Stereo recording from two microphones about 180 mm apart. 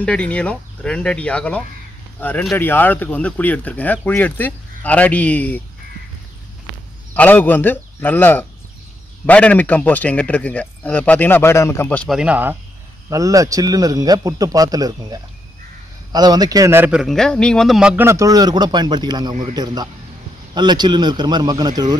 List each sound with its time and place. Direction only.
0.0 s speech: 5° left (ahead or behind)
7.2 s speech: 10° left (ahead or behind)
12.2 s a man's voice: 10° right (ahead or behind)